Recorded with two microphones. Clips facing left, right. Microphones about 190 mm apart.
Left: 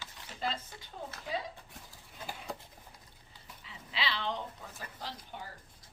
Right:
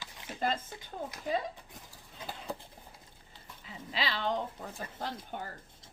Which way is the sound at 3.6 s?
45° right (ahead or behind).